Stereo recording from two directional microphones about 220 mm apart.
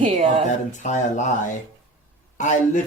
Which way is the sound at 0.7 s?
35° left (ahead or behind).